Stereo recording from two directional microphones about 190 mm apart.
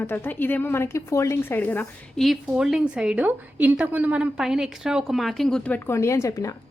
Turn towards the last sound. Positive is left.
turn(degrees=15)  # may be behind; listen again after turning